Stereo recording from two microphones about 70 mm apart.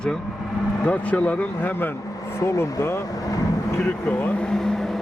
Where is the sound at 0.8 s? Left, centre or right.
Centre.